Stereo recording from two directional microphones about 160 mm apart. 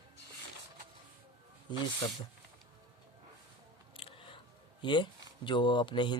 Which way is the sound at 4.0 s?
35° left (ahead or behind).